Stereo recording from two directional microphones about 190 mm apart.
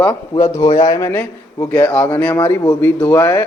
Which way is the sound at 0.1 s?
20° left (ahead or behind).